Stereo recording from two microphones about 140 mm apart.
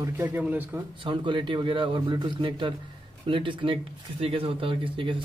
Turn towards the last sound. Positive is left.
turn(degrees=-35)  # may be behind; listen again after turning